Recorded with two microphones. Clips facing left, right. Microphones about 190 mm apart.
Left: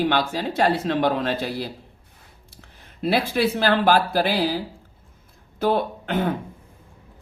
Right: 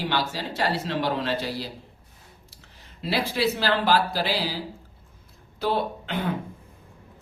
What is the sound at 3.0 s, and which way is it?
Speech, 55° left (ahead or behind).